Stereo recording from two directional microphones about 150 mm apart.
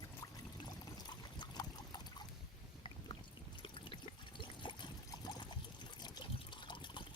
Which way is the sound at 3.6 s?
35° left (ahead or behind).